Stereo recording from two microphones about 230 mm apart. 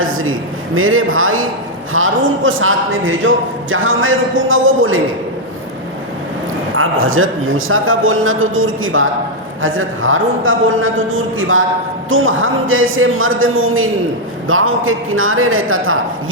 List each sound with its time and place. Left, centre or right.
0.0 s a man's voice: right
6.7 s a man's voice: right